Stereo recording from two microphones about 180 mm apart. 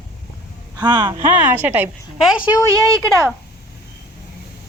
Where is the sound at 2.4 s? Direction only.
20° left (ahead or behind).